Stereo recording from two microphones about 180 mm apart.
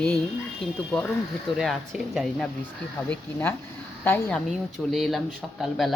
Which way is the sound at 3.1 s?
10° left (ahead or behind).